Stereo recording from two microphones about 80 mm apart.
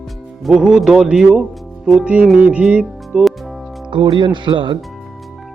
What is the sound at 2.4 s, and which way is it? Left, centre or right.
Music, centre.